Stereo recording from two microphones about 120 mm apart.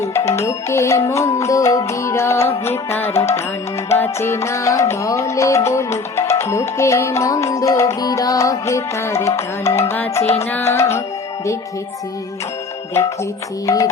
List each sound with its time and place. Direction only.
0.3 s music: 20° left (ahead or behind)
13.7 s music: 25° left (ahead or behind)